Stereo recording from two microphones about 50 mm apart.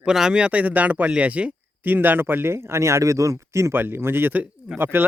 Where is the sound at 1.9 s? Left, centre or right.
Right.